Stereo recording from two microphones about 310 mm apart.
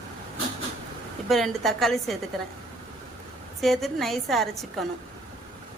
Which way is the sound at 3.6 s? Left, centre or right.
Centre.